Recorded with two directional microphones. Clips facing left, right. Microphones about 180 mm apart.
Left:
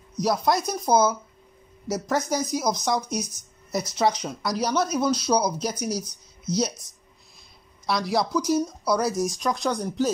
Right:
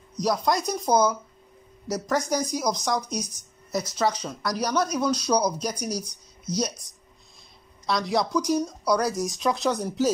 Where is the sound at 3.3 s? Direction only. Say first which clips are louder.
Even; 15° right (ahead or behind).